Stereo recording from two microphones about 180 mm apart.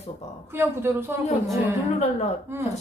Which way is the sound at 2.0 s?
40° left (ahead or behind).